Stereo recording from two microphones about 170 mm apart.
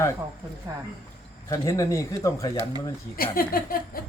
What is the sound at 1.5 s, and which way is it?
Speech, 20° left (ahead or behind).